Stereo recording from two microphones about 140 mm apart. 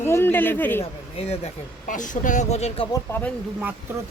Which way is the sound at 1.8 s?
65° left (ahead or behind).